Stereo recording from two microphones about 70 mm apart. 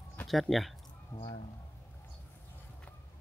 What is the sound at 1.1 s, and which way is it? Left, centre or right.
Speech, left.